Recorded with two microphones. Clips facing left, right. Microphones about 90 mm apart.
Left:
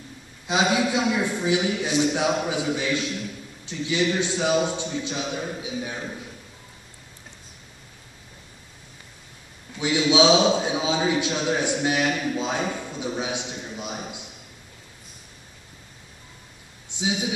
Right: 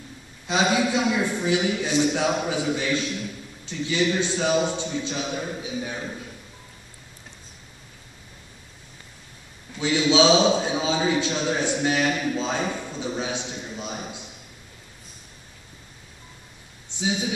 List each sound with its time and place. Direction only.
0.5 s a man's voice: 15° left (ahead or behind)
9.8 s a man's voice: 15° left (ahead or behind)
17.0 s a man's voice: 15° left (ahead or behind)